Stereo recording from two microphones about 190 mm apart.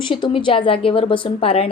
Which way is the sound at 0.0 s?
25° left (ahead or behind).